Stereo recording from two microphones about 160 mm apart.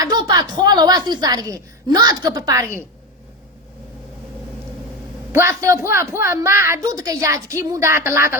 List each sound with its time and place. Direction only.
0.0 s a woman's voice: 25° right (ahead or behind)
5.3 s a woman's voice: 15° right (ahead or behind)